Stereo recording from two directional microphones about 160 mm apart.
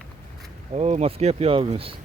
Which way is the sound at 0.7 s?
40° right (ahead or behind).